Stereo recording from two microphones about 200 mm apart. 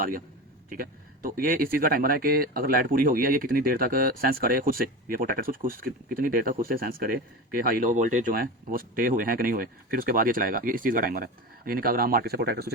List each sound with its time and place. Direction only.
0.7 s speech: 45° right (ahead or behind)